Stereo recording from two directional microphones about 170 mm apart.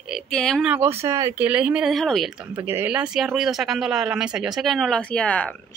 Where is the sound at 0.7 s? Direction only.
15° right (ahead or behind).